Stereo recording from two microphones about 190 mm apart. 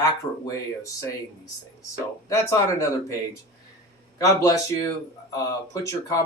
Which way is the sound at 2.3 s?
15° left (ahead or behind).